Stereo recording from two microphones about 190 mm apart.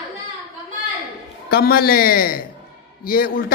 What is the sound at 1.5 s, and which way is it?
Speech, 55° left (ahead or behind).